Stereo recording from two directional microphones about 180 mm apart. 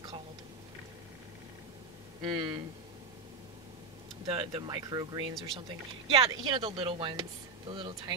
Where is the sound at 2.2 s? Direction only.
25° right (ahead or behind).